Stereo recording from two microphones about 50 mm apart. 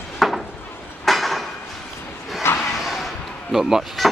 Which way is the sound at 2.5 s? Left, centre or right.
Left.